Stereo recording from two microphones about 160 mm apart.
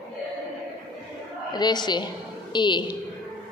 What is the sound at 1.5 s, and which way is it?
A woman's voice, 25° left (ahead or behind).